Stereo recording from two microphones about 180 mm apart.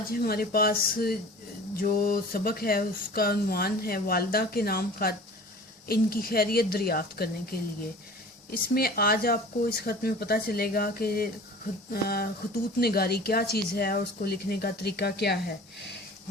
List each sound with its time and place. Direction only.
0.1 s speech: 55° left (ahead or behind)